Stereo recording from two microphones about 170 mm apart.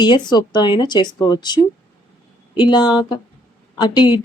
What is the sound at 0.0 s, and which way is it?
A woman's voice, 25° left (ahead or behind).